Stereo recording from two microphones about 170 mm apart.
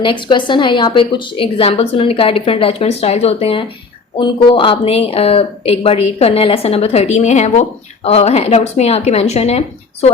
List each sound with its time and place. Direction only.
0.0 s a woman's voice: 30° left (ahead or behind)